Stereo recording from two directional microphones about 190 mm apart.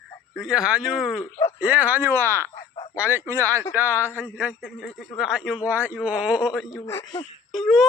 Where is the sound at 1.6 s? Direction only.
10° right (ahead or behind).